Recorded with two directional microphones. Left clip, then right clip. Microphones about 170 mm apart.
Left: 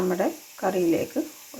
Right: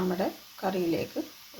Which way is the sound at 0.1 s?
15° left (ahead or behind).